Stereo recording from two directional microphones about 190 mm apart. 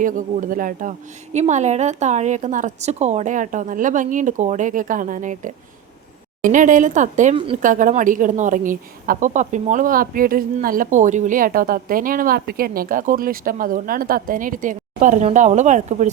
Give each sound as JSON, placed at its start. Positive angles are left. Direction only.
{"t": 0.0, "sound": "a woman's voice", "side_deg": -45}